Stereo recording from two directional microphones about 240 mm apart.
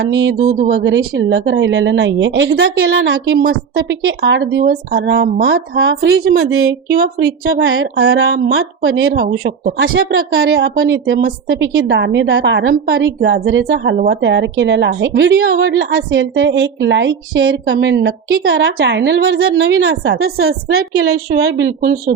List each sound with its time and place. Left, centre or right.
0.0 s a woman's voice: right